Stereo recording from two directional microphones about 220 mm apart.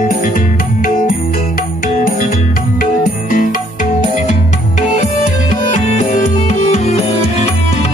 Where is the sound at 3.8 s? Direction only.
35° left (ahead or behind).